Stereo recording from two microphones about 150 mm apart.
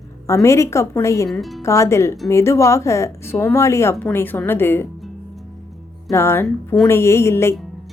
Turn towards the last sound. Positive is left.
turn(degrees=15)  # may be behind; listen again after turning